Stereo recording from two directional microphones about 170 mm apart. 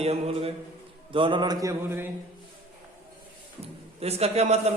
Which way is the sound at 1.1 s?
30° right (ahead or behind).